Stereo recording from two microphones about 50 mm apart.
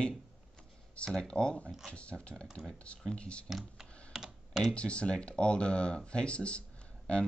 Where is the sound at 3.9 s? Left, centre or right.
Left.